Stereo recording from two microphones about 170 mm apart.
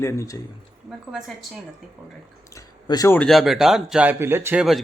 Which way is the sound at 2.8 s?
25° left (ahead or behind).